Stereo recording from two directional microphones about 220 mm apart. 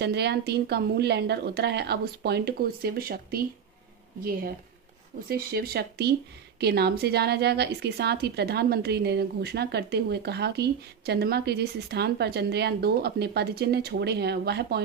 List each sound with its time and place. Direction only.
0.0 s a woman's voice: 50° right (ahead or behind)
5.3 s a woman's voice: 45° right (ahead or behind)